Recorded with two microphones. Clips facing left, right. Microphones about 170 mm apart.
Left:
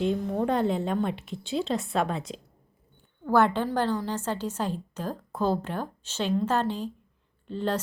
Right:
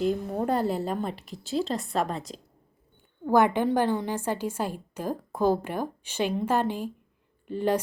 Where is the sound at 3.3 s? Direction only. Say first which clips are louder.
Right 1 dB; 15° right (ahead or behind).